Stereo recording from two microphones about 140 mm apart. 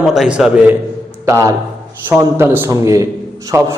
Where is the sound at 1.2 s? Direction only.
20° right (ahead or behind).